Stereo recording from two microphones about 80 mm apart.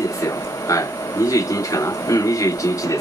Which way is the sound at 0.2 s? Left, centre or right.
Left.